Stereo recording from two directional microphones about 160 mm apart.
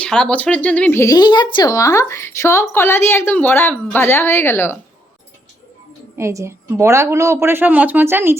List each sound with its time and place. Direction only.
0.0 s speech: 5° left (ahead or behind)
6.1 s a woman's voice: 15° right (ahead or behind)